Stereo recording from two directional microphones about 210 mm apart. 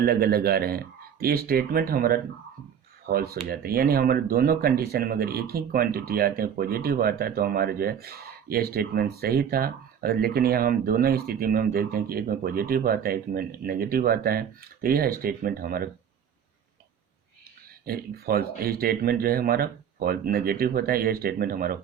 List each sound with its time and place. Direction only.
0.0 s speech: 50° right (ahead or behind)
17.8 s speech: 45° right (ahead or behind)